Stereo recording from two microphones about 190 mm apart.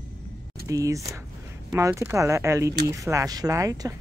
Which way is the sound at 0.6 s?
15° right (ahead or behind).